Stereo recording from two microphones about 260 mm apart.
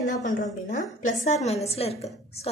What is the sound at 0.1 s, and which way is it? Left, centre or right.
A woman's voice, left.